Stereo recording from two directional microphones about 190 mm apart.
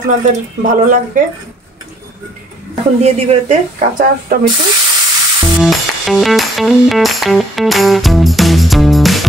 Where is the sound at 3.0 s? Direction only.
35° right (ahead or behind).